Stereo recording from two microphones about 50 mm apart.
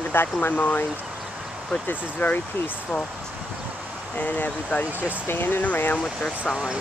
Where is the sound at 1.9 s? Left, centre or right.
Left.